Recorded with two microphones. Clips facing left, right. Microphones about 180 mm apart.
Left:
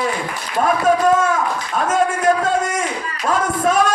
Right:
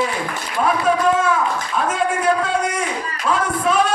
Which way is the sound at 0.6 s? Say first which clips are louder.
Left 2 dB; 45° left (ahead or behind).